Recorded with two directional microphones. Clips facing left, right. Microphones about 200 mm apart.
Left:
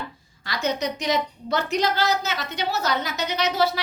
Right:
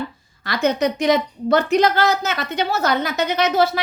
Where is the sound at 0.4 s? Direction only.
55° right (ahead or behind).